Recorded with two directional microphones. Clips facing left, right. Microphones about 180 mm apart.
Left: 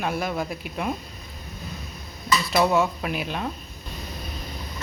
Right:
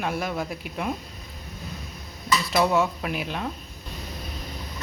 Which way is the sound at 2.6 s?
10° left (ahead or behind).